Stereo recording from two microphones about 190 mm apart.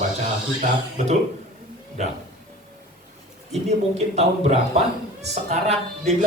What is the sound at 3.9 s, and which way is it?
Speech, 35° right (ahead or behind).